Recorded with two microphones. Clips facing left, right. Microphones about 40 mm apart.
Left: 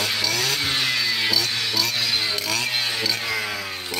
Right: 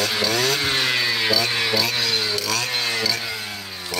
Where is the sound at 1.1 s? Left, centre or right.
Centre.